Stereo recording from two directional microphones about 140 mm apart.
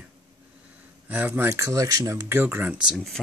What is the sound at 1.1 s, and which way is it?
Speech, 10° right (ahead or behind).